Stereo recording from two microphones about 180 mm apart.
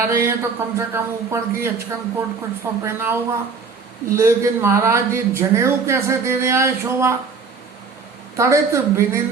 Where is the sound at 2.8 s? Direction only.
10° right (ahead or behind).